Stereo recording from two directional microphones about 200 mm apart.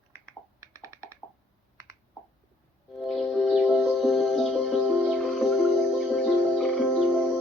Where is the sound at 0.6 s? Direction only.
15° right (ahead or behind).